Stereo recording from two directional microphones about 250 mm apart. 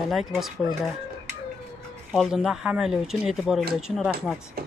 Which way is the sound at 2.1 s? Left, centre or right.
Centre.